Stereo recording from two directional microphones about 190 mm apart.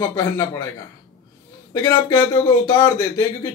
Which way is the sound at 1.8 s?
15° left (ahead or behind).